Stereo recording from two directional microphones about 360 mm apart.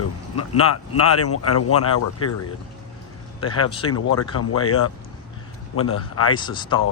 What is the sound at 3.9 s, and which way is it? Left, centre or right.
Speech, left.